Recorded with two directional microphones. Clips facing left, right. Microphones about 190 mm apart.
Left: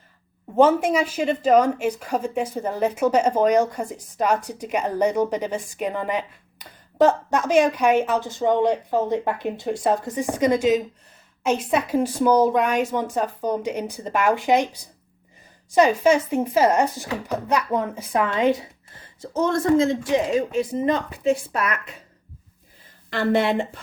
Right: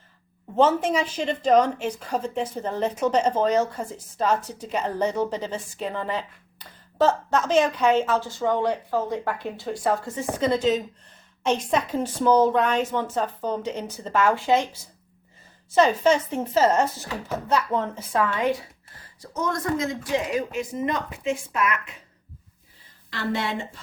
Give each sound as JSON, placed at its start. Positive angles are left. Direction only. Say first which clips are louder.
{"t": 0.5, "sound": "a woman's voice", "louder": "left 3 dB", "side_deg": 10}
{"t": 23.0, "sound": "speech", "louder": "left 7 dB", "side_deg": 55}